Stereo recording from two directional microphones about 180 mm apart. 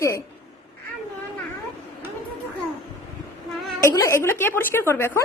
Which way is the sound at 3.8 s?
15° left (ahead or behind).